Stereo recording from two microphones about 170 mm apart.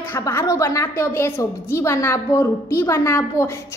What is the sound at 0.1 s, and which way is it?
A woman's voice, 15° left (ahead or behind).